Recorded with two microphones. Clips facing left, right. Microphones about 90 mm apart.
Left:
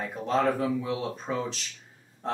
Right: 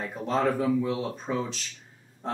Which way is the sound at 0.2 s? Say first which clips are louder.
Even; centre (ahead or behind).